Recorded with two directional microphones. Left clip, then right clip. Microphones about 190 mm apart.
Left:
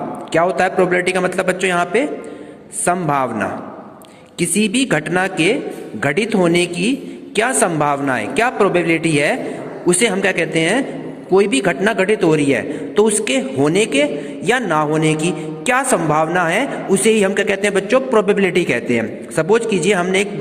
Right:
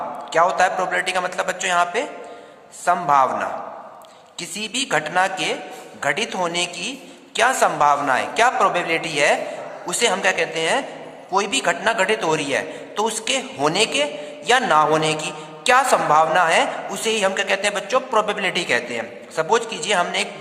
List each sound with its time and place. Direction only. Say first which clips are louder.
0.3 s speech: left 2 dB; 15° left (ahead or behind)